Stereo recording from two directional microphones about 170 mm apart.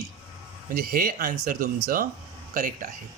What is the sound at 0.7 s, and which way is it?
Speech, 60° right (ahead or behind).